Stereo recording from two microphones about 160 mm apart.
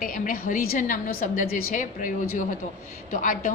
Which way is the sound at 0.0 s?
60° left (ahead or behind).